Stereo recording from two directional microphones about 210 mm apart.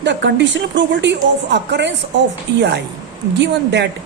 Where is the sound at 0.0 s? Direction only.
55° right (ahead or behind).